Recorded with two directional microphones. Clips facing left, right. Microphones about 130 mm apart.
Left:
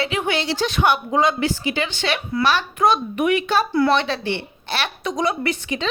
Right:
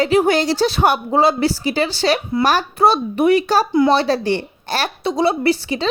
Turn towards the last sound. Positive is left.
turn(degrees=-35)  # may be behind; listen again after turning